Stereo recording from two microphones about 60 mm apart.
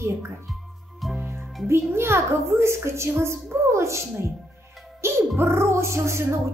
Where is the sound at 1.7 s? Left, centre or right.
Right.